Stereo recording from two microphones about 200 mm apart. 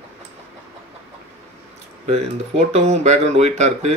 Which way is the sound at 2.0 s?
35° right (ahead or behind).